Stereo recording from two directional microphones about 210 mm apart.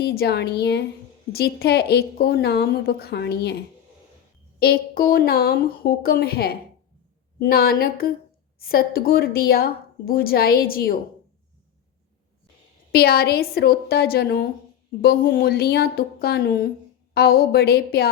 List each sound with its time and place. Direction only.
0.0 s a woman's voice: 50° left (ahead or behind)
4.6 s a woman's voice: 45° left (ahead or behind)
12.9 s a woman's voice: 50° left (ahead or behind)